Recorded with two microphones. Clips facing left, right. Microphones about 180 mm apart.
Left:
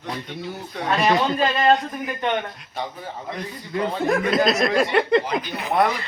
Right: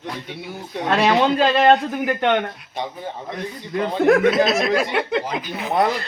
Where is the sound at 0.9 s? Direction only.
75° right (ahead or behind).